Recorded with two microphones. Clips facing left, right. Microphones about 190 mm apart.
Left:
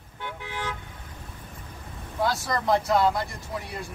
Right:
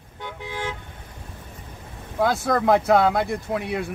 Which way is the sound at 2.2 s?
55° right (ahead or behind).